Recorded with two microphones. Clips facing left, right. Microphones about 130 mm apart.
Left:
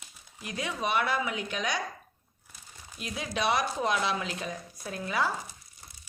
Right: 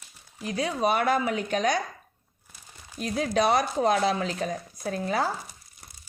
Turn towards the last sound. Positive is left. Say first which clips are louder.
# right 4 dB
turn(degrees=-40)  # may be behind; listen again after turning